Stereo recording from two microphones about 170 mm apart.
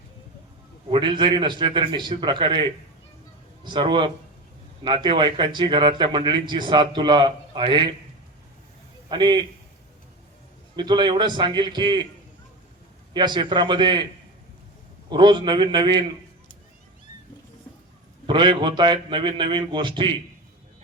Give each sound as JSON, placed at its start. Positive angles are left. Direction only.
{"t": 0.9, "sound": "a man's voice", "side_deg": -30}
{"t": 9.0, "sound": "a man's voice", "side_deg": -25}
{"t": 10.8, "sound": "a man's voice", "side_deg": -25}
{"t": 13.1, "sound": "a man's voice", "side_deg": -25}
{"t": 15.1, "sound": "a man's voice", "side_deg": -25}
{"t": 18.3, "sound": "a man's voice", "side_deg": -25}